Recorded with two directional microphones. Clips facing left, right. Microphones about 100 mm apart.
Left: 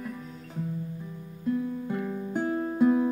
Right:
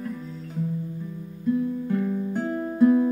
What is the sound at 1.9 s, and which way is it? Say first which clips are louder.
Music: right 5 dB; 15° left (ahead or behind).